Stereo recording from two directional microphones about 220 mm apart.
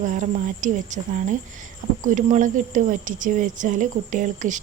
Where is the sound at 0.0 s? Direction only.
35° right (ahead or behind).